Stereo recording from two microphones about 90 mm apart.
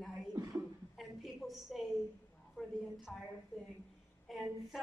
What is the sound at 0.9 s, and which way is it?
A woman's voice, centre (ahead or behind).